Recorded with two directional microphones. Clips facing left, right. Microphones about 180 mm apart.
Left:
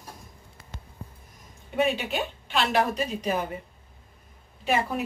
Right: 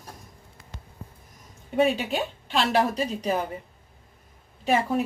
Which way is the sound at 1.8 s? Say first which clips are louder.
Right 3 dB; 35° right (ahead or behind).